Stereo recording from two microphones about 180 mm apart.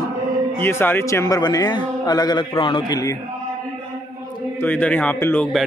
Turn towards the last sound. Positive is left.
turn(degrees=5)  # may be behind; listen again after turning